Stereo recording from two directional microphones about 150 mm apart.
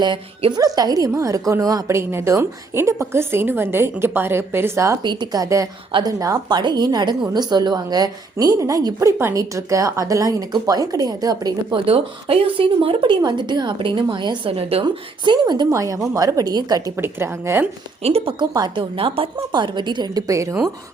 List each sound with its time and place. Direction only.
0.0 s a woman's voice: 30° right (ahead or behind)
5.0 s a woman's voice: 30° right (ahead or behind)
11.9 s speech: 40° right (ahead or behind)
14.8 s a woman's voice: 30° right (ahead or behind)
18.0 s speech: 40° right (ahead or behind); by 20.7 s 20° right (ahead or behind)